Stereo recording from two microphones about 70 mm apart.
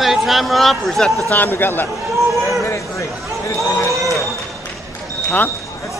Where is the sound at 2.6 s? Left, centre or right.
Left.